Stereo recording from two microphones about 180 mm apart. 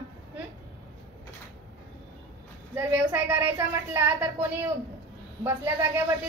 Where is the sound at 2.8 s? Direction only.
15° right (ahead or behind).